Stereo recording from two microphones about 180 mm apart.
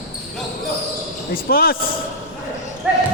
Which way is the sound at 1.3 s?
55° left (ahead or behind).